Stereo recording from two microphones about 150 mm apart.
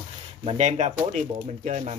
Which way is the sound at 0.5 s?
50° right (ahead or behind).